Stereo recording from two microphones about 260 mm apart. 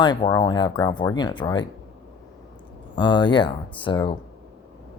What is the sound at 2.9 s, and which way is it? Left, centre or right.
Speech, centre.